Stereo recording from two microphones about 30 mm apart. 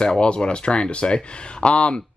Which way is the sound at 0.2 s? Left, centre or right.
Left.